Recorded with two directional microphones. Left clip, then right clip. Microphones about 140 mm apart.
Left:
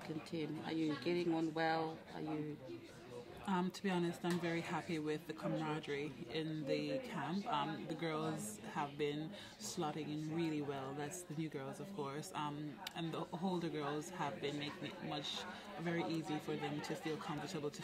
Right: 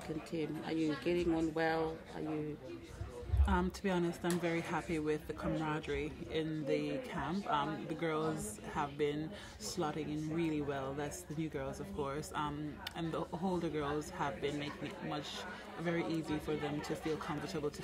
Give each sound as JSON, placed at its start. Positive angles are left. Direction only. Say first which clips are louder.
{"t": 0.4, "sound": "speech", "louder": "right 4 dB", "side_deg": 30}
{"t": 3.4, "sound": "speech", "louder": "right 4 dB", "side_deg": 40}